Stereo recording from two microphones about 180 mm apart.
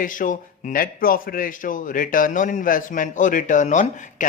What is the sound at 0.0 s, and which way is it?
A man's voice, 45° left (ahead or behind).